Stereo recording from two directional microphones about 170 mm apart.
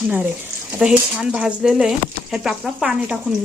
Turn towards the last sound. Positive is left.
turn(degrees=-5)  # may be behind; listen again after turning